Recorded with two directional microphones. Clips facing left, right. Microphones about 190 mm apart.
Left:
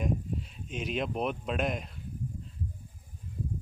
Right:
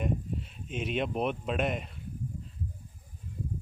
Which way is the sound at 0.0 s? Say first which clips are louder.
Even; centre (ahead or behind).